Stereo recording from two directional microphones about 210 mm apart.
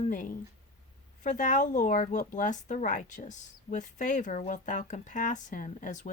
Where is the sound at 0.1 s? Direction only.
40° left (ahead or behind).